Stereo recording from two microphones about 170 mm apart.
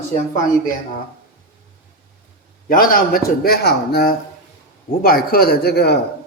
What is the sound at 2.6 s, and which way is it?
A man's voice, 55° left (ahead or behind).